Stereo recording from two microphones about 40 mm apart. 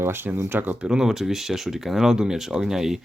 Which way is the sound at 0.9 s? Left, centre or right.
Centre.